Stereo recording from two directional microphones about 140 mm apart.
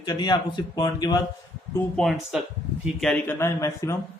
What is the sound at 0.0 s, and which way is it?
A man's voice, 30° left (ahead or behind).